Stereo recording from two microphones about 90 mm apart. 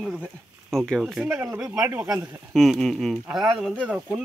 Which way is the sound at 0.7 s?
5° left (ahead or behind).